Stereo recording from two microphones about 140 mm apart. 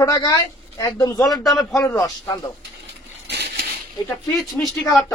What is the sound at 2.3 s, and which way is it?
Speech, 25° left (ahead or behind).